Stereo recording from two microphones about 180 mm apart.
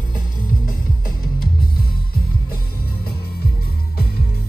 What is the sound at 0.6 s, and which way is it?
Music, 50° left (ahead or behind).